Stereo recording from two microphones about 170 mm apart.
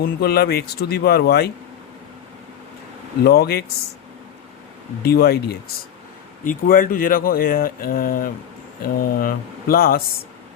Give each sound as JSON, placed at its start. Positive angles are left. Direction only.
{"t": 0.0, "sound": "speech", "side_deg": 65}
{"t": 3.2, "sound": "speech", "side_deg": 70}
{"t": 5.0, "sound": "speech", "side_deg": 65}
{"t": 6.4, "sound": "speech", "side_deg": 55}